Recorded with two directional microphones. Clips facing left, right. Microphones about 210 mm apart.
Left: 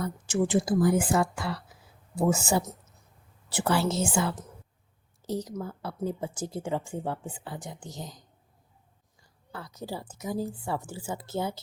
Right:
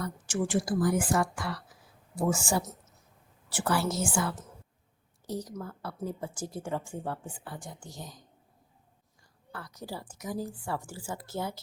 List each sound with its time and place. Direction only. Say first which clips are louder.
0.2 s a woman's voice: left 4 dB; 20° left (ahead or behind)
9.5 s speech: left 3 dB; 25° left (ahead or behind)